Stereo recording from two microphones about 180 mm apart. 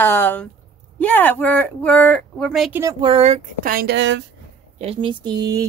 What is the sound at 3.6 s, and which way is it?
Speech, 60° right (ahead or behind).